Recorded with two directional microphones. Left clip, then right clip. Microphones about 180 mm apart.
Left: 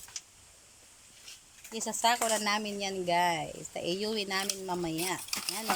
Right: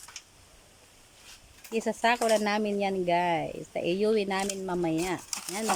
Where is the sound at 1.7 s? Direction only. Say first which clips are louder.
Right 3 dB; 20° right (ahead or behind).